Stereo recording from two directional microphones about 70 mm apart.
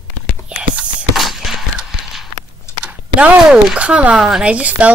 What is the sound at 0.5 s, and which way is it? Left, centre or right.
Whispering, centre.